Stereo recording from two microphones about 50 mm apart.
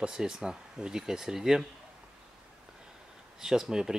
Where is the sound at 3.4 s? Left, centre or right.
Centre.